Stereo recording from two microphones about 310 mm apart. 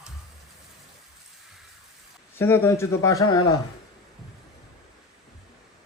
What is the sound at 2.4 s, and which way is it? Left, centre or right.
A man's voice, centre.